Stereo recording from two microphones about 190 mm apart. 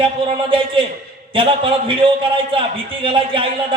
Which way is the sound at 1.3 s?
25° right (ahead or behind).